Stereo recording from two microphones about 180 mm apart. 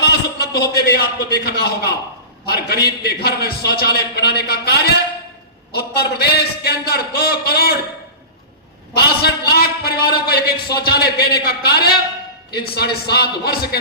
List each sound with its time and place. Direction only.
0.0 s a man's voice: 60° left (ahead or behind)
9.0 s a man's voice: 60° left (ahead or behind)